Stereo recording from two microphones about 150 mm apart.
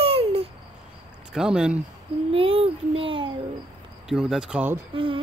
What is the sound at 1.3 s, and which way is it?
Speech, 5° right (ahead or behind).